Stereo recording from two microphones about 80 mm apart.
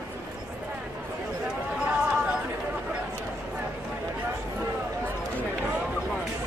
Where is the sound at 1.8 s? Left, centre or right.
Centre.